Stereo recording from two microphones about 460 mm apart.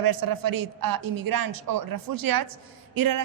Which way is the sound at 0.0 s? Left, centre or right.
Right.